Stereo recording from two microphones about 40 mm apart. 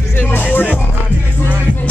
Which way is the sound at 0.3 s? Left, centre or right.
Left.